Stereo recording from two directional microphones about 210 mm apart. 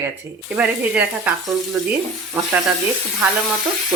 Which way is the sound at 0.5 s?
5° right (ahead or behind).